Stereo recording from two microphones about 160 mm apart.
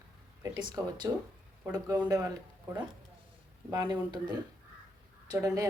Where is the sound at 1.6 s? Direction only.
10° right (ahead or behind).